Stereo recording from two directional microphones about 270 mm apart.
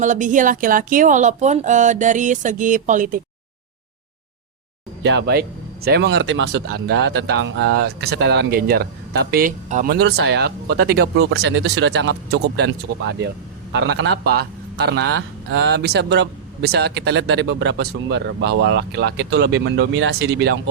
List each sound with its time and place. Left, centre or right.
0.0 s speech: right
5.0 s speech: right